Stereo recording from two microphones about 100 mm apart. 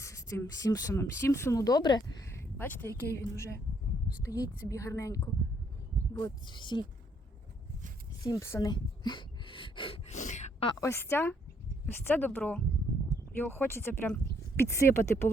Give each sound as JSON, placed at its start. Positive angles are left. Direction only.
{"t": 0.0, "sound": "speech", "side_deg": 30}
{"t": 2.3, "sound": "speech", "side_deg": 20}
{"t": 6.1, "sound": "speech", "side_deg": 45}
{"t": 8.2, "sound": "speech", "side_deg": 30}
{"t": 8.7, "sound": "a sound", "side_deg": 50}
{"t": 10.8, "sound": "speech", "side_deg": 25}